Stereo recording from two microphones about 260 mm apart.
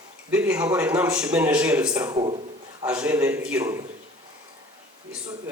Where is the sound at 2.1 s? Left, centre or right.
Centre.